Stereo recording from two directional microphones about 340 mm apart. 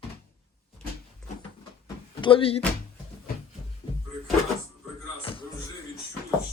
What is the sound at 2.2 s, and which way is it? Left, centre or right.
Speech, centre.